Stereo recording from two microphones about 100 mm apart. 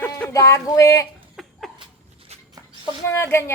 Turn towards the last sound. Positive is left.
turn(degrees=25)  # may be behind; listen again after turning